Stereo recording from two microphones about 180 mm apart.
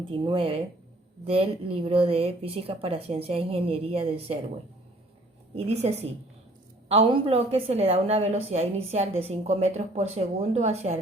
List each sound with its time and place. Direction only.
0.3 s a woman's voice: 30° right (ahead or behind)
5.5 s a woman's voice: 35° right (ahead or behind)